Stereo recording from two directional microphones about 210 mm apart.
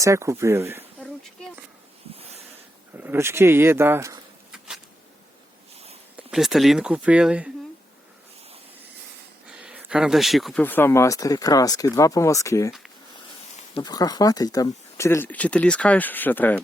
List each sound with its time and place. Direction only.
0.0 s speech: 15° right (ahead or behind)
2.1 s a sound: 30° right (ahead or behind)
2.9 s speech: 10° right (ahead or behind)
4.5 s a sound: 5° right (ahead or behind)
6.3 s speech: centre (ahead or behind)
9.5 s speech: 5° right (ahead or behind); by 12.7 s 15° left (ahead or behind)
13.7 s speech: 20° left (ahead or behind)